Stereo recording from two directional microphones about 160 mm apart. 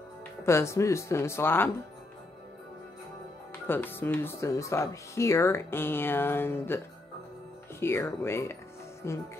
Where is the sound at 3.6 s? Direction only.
15° left (ahead or behind).